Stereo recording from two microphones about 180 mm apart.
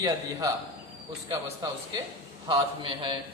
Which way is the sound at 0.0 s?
20° right (ahead or behind).